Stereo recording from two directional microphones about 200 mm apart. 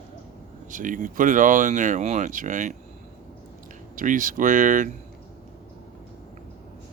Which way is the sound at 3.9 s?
40° right (ahead or behind).